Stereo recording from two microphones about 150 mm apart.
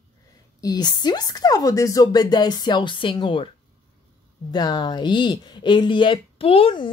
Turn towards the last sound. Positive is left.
turn(degrees=35)  # may be behind; listen again after turning